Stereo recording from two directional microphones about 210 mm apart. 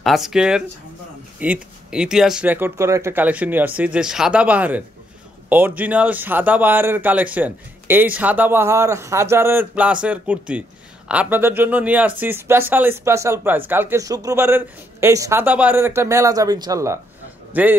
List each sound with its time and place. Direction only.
0.0 s a man's voice: centre (ahead or behind)